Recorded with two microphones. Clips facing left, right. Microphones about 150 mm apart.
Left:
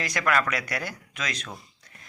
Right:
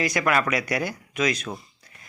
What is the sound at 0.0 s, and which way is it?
Speech, 10° right (ahead or behind).